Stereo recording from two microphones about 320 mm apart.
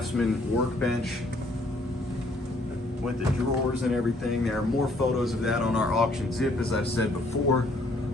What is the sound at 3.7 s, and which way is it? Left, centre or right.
A man's voice, centre.